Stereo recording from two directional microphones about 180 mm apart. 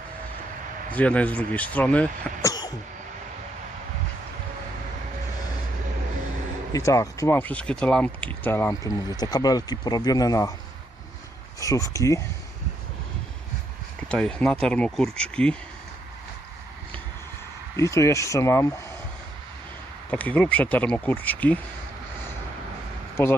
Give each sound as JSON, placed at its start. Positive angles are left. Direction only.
{"t": 0.9, "sound": "speech", "side_deg": 10}
{"t": 2.5, "sound": "a sound", "side_deg": 20}
{"t": 6.7, "sound": "speech", "side_deg": 20}
{"t": 11.6, "sound": "speech", "side_deg": 20}
{"t": 14.1, "sound": "speech", "side_deg": 5}
{"t": 17.7, "sound": "speech", "side_deg": 15}
{"t": 20.1, "sound": "speech", "side_deg": 10}
{"t": 23.1, "sound": "speech", "side_deg": 15}